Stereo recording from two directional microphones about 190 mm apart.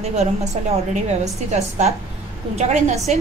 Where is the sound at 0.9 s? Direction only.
35° right (ahead or behind).